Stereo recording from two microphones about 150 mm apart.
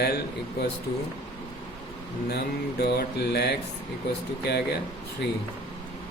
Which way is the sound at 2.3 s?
90° left.